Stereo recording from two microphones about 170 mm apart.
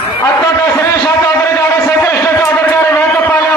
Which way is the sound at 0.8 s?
15° left (ahead or behind).